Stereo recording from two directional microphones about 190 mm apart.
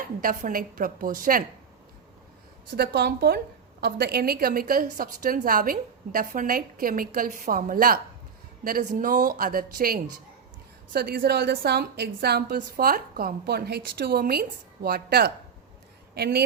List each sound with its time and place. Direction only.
0.2 s a woman's voice: 45° right (ahead or behind)
2.6 s a woman's voice: 60° right (ahead or behind)